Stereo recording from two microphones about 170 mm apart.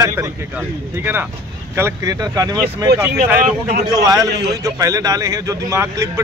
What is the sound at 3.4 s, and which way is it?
Speech, 60° right (ahead or behind).